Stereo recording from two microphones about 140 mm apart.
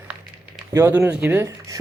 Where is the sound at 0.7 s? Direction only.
20° right (ahead or behind).